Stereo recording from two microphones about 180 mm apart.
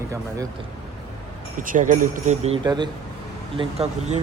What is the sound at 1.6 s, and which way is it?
Speech, 45° right (ahead or behind).